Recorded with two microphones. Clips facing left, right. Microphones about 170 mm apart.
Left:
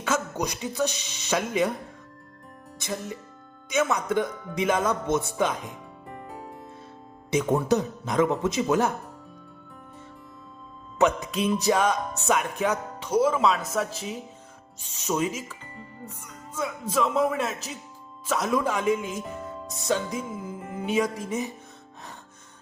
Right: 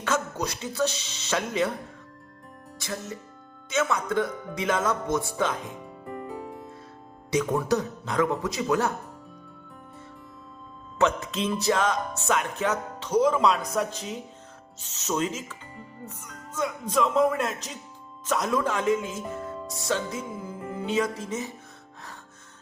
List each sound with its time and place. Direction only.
0.0 s speech: 15° left (ahead or behind)
2.7 s speech: 15° left (ahead or behind)
6.2 s music: centre (ahead or behind)
7.3 s speech: 20° left (ahead or behind)
10.9 s speech: 15° left (ahead or behind)
15.6 s music: centre (ahead or behind)
16.0 s speech: 10° left (ahead or behind)